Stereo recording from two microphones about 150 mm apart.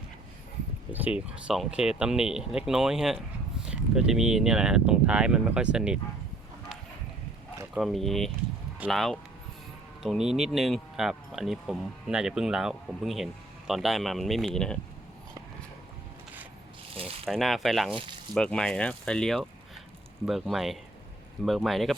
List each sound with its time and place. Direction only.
0.9 s speech: 10° right (ahead or behind)
7.7 s speech: centre (ahead or behind)
16.9 s a sound: 40° right (ahead or behind)
17.2 s speech: centre (ahead or behind)